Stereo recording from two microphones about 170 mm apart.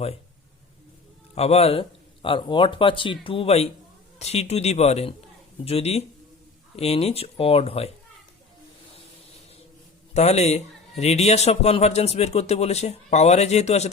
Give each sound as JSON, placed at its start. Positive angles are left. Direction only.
{"t": 1.4, "sound": "a man's voice", "side_deg": 35}
{"t": 10.2, "sound": "a man's voice", "side_deg": 40}